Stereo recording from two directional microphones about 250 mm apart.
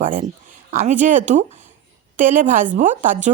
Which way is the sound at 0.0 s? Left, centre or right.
Right.